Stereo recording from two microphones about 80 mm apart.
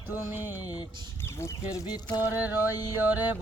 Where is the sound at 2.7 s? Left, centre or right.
Left.